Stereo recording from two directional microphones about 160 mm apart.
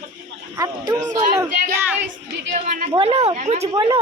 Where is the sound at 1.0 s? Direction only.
15° right (ahead or behind).